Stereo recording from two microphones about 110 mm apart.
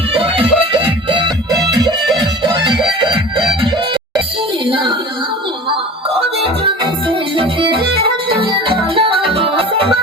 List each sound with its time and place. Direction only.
0.1 s music: 55° right (ahead or behind)
1.7 s music: 40° right (ahead or behind)
3.0 s music: 50° right (ahead or behind)
6.7 s music: 55° right (ahead or behind)